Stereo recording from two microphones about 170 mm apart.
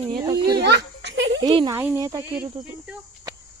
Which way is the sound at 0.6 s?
90° right.